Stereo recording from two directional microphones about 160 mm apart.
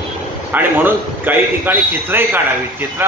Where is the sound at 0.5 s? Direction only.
10° right (ahead or behind).